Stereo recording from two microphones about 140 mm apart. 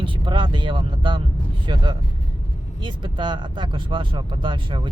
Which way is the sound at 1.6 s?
35° right (ahead or behind).